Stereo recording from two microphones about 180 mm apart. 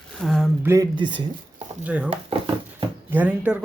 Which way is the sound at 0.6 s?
20° right (ahead or behind).